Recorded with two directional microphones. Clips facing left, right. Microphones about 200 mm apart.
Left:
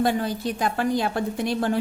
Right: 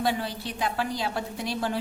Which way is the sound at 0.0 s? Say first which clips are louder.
Left 5 dB; 50° left (ahead or behind).